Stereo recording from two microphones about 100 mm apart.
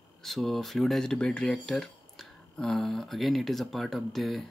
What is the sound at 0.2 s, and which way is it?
Speech, 5° left (ahead or behind).